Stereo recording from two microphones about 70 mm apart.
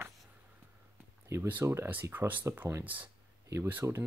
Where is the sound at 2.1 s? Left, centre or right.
Right.